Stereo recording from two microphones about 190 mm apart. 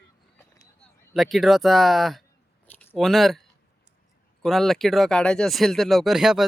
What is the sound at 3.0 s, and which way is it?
Speech, centre (ahead or behind).